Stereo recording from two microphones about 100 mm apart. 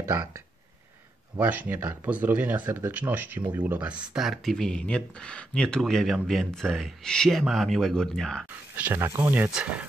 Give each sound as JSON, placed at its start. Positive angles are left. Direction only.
{"t": 0.0, "sound": "speech", "side_deg": -30}
{"t": 1.4, "sound": "speech", "side_deg": -15}
{"t": 8.7, "sound": "speech", "side_deg": -20}